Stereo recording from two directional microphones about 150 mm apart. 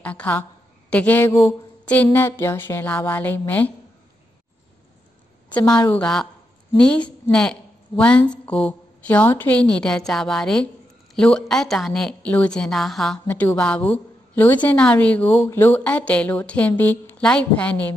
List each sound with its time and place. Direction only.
0.0 s a woman's voice: 10° left (ahead or behind)
5.7 s a woman's voice: 5° left (ahead or behind)